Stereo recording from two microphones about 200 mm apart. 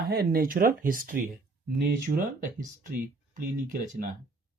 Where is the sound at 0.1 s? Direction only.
50° right (ahead or behind).